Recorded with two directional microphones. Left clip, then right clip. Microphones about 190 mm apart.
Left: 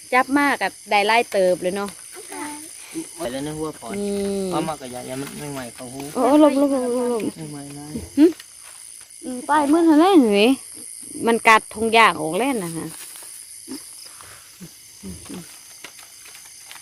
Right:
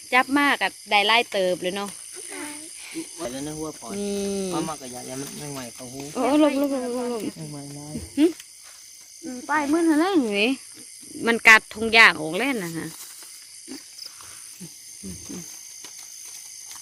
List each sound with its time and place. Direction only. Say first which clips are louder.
0.1 s speech: left 2 dB; centre (ahead or behind)
3.2 s speech: left 5 dB; 20° left (ahead or behind)
3.9 s speech: left 3 dB; 5° left (ahead or behind)
4.5 s speech: left 4 dB; 20° left (ahead or behind)
5.4 s speech: left 4 dB; centre (ahead or behind)
6.1 s speech: left 5 dB; 15° left (ahead or behind)
9.2 s speech: left 5 dB; centre (ahead or behind)
9.9 s speech: left 7 dB; 30° left (ahead or behind)
11.2 s speech: even; 5° left (ahead or behind)